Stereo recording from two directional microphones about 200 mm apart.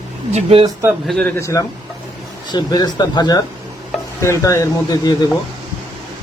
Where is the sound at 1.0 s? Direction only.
5° left (ahead or behind).